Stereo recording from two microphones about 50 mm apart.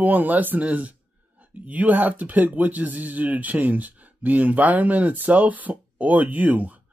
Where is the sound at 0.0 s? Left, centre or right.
Right.